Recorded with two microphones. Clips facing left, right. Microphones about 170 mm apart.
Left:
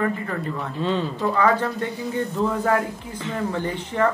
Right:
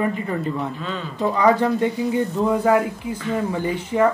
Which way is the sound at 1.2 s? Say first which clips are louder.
Right 5 dB; 15° right (ahead or behind).